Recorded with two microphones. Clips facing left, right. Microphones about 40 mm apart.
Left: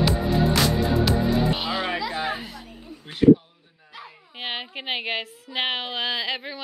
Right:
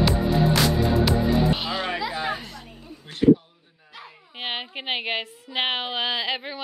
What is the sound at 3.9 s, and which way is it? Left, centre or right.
Speech, centre.